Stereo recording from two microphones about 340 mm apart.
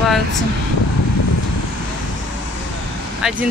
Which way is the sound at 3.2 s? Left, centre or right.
Centre.